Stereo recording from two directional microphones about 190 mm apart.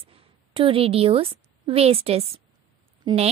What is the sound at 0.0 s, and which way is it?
A woman's voice, 30° right (ahead or behind).